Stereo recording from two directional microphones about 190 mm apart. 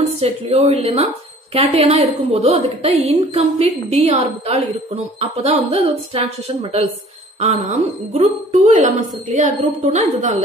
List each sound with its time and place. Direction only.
0.2 s speech: 30° right (ahead or behind)